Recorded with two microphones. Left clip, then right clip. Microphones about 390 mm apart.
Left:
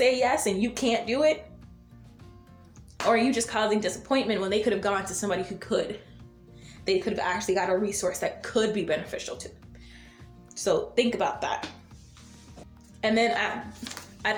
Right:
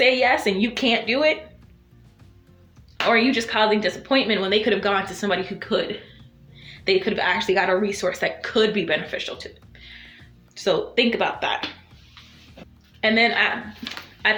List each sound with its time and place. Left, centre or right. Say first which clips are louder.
0.0 s a woman's voice: right 5 dB; left
3.1 s a woman's voice: right 4 dB; left
10.5 s a woman's voice: right 4 dB; left
13.0 s speech: right 6 dB; left